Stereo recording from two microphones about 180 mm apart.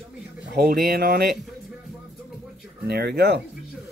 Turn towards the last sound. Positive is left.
turn(degrees=-65)  # may be behind; listen again after turning